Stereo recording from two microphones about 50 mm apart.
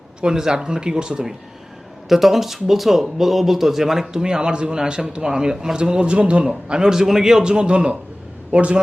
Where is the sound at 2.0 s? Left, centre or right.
Centre.